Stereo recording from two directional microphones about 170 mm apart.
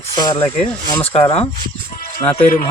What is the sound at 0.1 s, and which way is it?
Speech, 25° left (ahead or behind).